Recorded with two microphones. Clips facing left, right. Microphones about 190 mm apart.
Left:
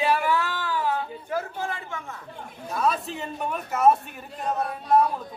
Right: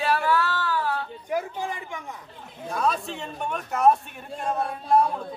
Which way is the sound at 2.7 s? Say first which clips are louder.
Even; 5° left (ahead or behind).